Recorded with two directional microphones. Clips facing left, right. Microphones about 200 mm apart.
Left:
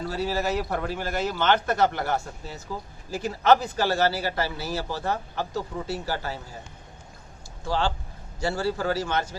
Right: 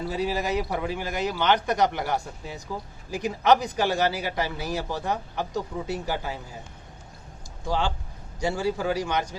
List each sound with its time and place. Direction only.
0.1 s a man's voice: 15° right (ahead or behind)
7.7 s a man's voice: 15° right (ahead or behind)